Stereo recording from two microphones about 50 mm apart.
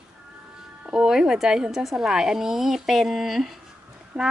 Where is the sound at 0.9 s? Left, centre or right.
Centre.